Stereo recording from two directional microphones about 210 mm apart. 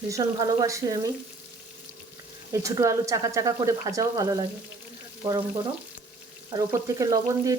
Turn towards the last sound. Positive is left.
turn(degrees=-15)  # may be behind; listen again after turning